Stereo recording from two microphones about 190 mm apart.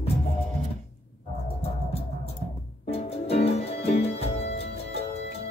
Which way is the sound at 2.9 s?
35° left (ahead or behind).